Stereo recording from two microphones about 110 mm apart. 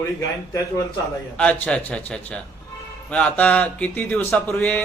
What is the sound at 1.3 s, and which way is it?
A man's voice, 10° left (ahead or behind).